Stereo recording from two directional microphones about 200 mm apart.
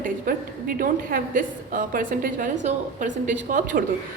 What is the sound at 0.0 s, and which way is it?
A woman's voice, 45° right (ahead or behind).